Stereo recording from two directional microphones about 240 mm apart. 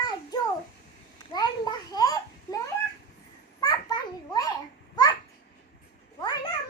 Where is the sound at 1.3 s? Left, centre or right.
Centre.